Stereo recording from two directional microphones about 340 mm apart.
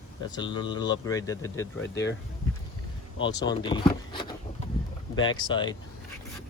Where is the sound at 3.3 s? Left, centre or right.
Centre.